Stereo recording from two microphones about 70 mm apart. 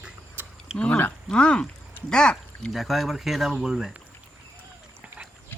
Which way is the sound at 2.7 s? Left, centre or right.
Centre.